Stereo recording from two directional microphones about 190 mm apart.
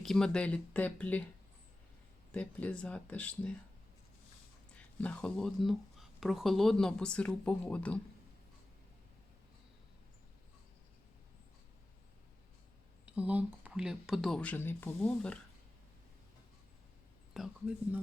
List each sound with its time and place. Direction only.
0.0 s speech: 5° left (ahead or behind)
2.3 s speech: 5° left (ahead or behind)
4.7 s speech: 5° left (ahead or behind)
13.1 s speech: 10° right (ahead or behind)
17.3 s speech: 5° right (ahead or behind)